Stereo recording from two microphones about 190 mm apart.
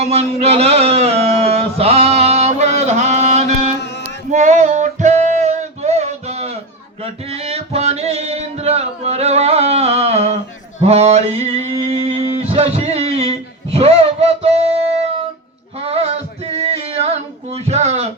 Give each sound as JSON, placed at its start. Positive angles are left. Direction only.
{"t": 0.0, "sound": "a sound", "side_deg": -35}
{"t": 4.3, "sound": "music", "side_deg": -40}
{"t": 10.8, "sound": "male singing", "side_deg": -35}
{"t": 15.8, "sound": "male singing", "side_deg": -30}